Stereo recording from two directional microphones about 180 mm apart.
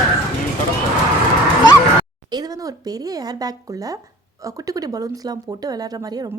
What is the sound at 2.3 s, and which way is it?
A woman's voice, 20° right (ahead or behind).